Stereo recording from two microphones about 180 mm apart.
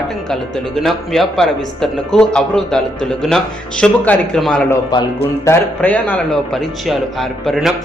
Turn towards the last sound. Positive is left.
turn(degrees=0)  # may be behind; listen again after turning